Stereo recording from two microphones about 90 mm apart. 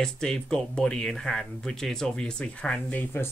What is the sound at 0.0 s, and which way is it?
Speech, 5° left (ahead or behind).